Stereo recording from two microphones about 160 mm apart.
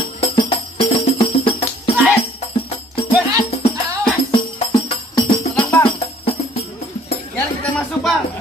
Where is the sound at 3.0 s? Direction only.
35° left (ahead or behind).